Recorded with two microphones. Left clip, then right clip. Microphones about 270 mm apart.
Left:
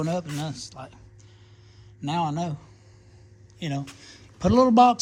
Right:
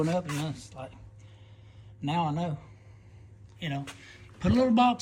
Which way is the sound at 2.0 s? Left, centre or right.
Centre.